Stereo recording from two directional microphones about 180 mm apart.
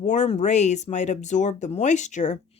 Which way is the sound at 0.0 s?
40° left (ahead or behind).